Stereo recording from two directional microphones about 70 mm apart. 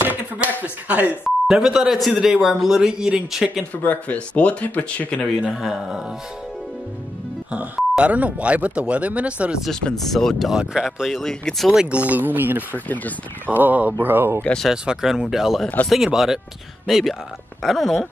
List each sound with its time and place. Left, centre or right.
0.0 s speech: right
1.2 s speech: centre
3.7 s speech: left
5.5 s speech: centre
8.0 s speech: centre
9.7 s speech: centre
10.5 s speech: centre
11.8 s speech: centre
12.7 s speech: left
13.6 s speech: right
14.7 s speech: centre